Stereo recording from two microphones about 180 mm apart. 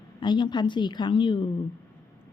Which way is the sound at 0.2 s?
25° left (ahead or behind).